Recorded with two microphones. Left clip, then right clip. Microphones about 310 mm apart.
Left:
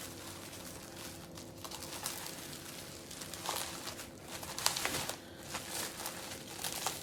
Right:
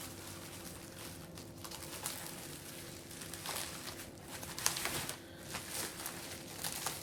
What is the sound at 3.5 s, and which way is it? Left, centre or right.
Bird, centre.